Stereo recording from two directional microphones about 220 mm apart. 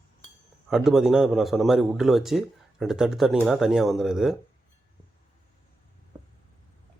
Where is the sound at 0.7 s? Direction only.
Centre (ahead or behind).